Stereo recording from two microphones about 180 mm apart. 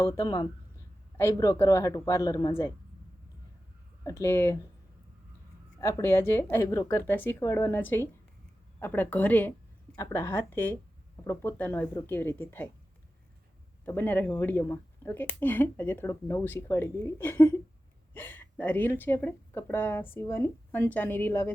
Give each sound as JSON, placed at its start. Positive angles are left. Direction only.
{"t": 0.2, "sound": "speech", "side_deg": 25}
{"t": 1.1, "sound": "speech", "side_deg": 15}
{"t": 4.0, "sound": "speech", "side_deg": 15}
{"t": 5.8, "sound": "speech", "side_deg": 15}
{"t": 13.8, "sound": "speech", "side_deg": 10}